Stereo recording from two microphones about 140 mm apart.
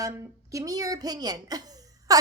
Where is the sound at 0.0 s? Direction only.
25° right (ahead or behind).